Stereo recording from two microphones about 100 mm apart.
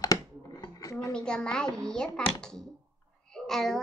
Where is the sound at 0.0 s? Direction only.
40° left (ahead or behind).